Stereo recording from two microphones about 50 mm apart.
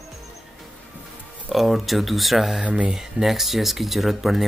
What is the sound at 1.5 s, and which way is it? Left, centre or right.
Speech, centre.